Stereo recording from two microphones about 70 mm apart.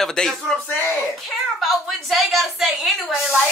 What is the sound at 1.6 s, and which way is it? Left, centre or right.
Speech, centre.